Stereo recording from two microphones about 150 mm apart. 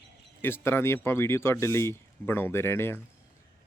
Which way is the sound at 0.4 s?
15° left (ahead or behind).